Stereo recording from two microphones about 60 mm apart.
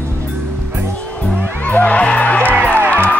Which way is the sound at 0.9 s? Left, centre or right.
Left.